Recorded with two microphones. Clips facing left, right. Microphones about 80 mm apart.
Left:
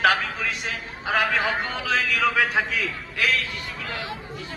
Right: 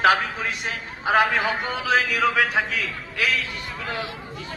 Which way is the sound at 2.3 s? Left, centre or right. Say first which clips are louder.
Right 1 dB; centre.